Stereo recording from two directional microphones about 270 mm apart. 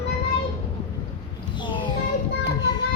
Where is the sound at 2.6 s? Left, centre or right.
Centre.